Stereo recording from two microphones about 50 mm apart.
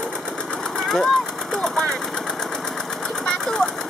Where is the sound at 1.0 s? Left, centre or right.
Centre.